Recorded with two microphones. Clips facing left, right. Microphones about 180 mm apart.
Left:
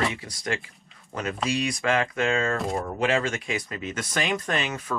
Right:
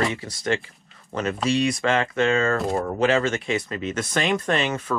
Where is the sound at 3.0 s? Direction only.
30° right (ahead or behind).